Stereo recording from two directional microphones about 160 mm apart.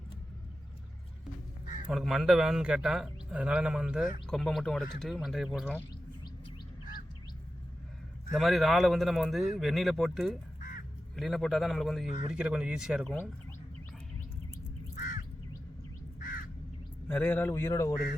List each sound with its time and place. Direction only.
1.9 s a man's voice: centre (ahead or behind)
8.3 s a man's voice: centre (ahead or behind)
10.6 s crow: 60° left (ahead or behind)
11.2 s a man's voice: centre (ahead or behind)
14.9 s crow: 55° left (ahead or behind)
16.2 s crow: 65° left (ahead or behind)
17.1 s a man's voice: 15° left (ahead or behind)